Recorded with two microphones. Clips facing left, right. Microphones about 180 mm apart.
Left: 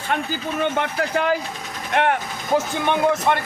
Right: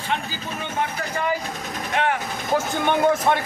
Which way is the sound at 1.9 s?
60° left (ahead or behind).